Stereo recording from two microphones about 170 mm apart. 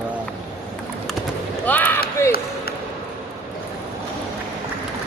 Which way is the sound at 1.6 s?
10° left (ahead or behind).